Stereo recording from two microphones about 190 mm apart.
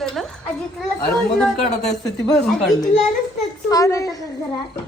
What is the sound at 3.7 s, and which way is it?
Speech, 15° left (ahead or behind).